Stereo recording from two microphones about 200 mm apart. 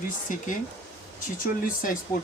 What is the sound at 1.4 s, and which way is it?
Speech, 45° left (ahead or behind).